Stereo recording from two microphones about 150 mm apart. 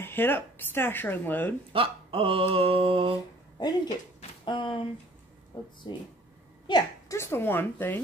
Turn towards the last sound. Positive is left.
turn(degrees=15)  # may be behind; listen again after turning